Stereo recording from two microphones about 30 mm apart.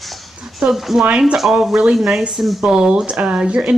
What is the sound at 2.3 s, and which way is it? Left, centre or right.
Speech, centre.